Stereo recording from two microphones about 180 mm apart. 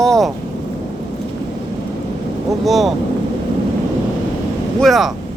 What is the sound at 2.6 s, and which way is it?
Speech, centre (ahead or behind).